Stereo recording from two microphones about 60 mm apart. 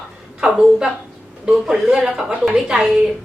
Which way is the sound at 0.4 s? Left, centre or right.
Centre.